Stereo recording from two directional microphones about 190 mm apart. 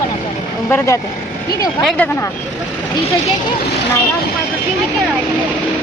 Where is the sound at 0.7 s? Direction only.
10° left (ahead or behind).